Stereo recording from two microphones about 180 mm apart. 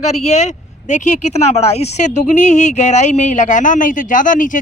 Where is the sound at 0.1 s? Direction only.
40° left (ahead or behind).